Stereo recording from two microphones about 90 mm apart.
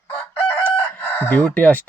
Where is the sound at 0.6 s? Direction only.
20° left (ahead or behind).